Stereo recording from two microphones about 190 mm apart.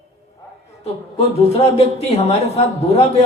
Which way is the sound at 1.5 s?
35° left (ahead or behind).